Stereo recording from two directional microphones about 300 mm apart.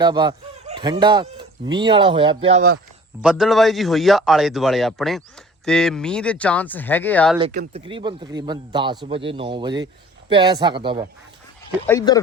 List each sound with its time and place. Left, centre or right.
0.0 s speech: centre
3.2 s a man's voice: centre
7.5 s speech: right
7.9 s speech: centre
11.9 s speech: centre